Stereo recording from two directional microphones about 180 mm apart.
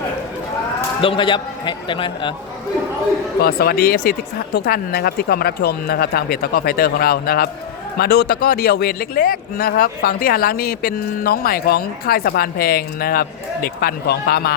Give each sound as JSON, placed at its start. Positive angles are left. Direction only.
{"t": 1.0, "sound": "a man's voice", "side_deg": 30}
{"t": 3.4, "sound": "speech", "side_deg": 60}